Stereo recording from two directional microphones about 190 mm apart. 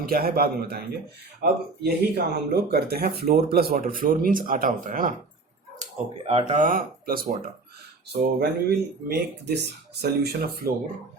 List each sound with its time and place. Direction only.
0.0 s speech: 50° right (ahead or behind)
5.8 s speech: 30° right (ahead or behind)
6.5 s speech: 45° right (ahead or behind)